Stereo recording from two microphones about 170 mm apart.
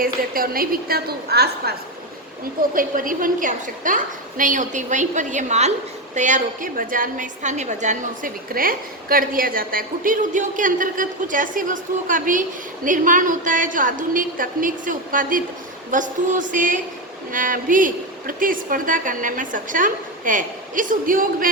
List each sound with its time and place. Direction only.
0.0 s a woman's voice: 60° right (ahead or behind)
2.7 s a woman's voice: 55° right (ahead or behind)